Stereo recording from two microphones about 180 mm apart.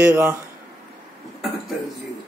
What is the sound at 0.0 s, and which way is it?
Speech, 10° right (ahead or behind).